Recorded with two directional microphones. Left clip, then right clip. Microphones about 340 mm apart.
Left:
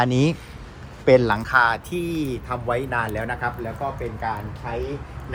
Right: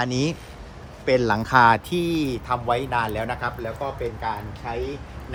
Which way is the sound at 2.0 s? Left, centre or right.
Centre.